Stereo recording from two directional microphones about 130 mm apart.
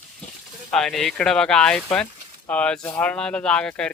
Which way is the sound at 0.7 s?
5° left (ahead or behind).